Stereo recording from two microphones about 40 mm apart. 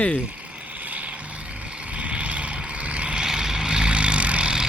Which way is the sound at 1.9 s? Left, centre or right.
Right.